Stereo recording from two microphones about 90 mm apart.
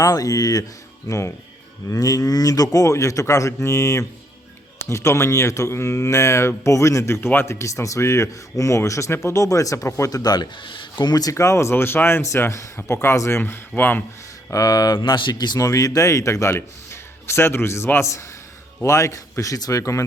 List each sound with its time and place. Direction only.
0.0 s speech: 40° left (ahead or behind)
11.3 s speech: 30° left (ahead or behind)
14.5 s speech: 45° left (ahead or behind)
15.0 s speech: 60° left (ahead or behind)
15.5 s speech: 40° left (ahead or behind)